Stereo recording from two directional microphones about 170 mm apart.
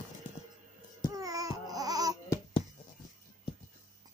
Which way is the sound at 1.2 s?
20° right (ahead or behind).